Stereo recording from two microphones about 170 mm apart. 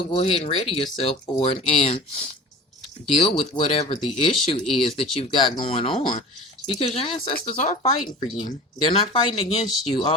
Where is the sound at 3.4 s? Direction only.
35° left (ahead or behind).